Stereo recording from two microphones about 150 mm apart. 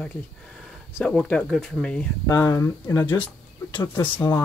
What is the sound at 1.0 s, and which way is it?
Speech, 5° left (ahead or behind).